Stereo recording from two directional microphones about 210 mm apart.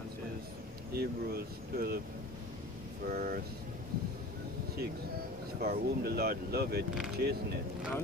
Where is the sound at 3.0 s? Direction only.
45° right (ahead or behind).